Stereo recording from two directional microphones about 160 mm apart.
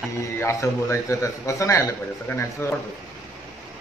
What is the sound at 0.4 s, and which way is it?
A man's voice, 15° left (ahead or behind).